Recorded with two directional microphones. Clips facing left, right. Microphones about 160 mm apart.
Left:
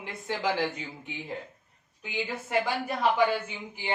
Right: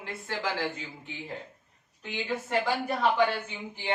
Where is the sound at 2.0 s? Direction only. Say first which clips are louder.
Right 1 dB; 5° left (ahead or behind).